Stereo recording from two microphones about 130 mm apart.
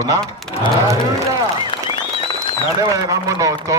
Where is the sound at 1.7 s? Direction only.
35° left (ahead or behind).